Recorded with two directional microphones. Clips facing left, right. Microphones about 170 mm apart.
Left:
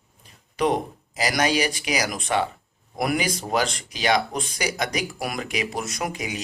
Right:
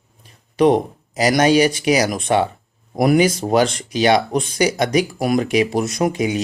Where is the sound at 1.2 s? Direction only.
30° right (ahead or behind).